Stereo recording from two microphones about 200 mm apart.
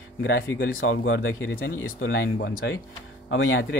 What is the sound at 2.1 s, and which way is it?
Speech, 60° left (ahead or behind).